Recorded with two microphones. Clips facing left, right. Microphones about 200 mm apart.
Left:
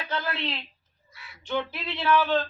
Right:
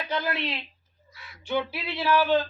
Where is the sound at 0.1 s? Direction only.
15° right (ahead or behind).